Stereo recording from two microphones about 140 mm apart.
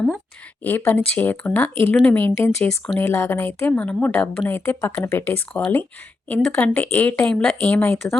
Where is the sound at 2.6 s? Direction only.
5° left (ahead or behind).